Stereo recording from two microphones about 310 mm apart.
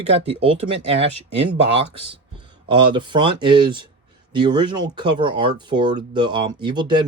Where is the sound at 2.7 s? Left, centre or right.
Centre.